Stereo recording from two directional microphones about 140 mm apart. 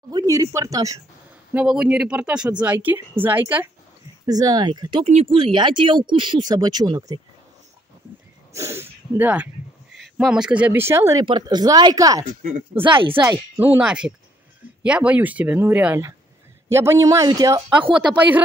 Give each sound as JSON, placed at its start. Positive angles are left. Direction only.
{"t": 0.1, "sound": "speech", "side_deg": -25}
{"t": 1.5, "sound": "speech", "side_deg": -5}
{"t": 4.3, "sound": "speech", "side_deg": -30}
{"t": 5.0, "sound": "speech", "side_deg": -45}
{"t": 8.5, "sound": "speech", "side_deg": -20}
{"t": 11.2, "sound": "speech", "side_deg": -30}
{"t": 12.8, "sound": "speech", "side_deg": -35}
{"t": 13.6, "sound": "speech", "side_deg": -10}